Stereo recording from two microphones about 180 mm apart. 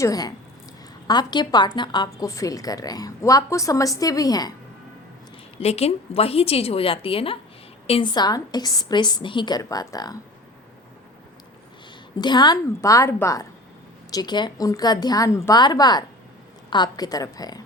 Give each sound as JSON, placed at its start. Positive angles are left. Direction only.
{"t": 0.0, "sound": "a woman's voice", "side_deg": 20}
{"t": 5.5, "sound": "a woman's voice", "side_deg": 35}
{"t": 12.2, "sound": "a woman's voice", "side_deg": 25}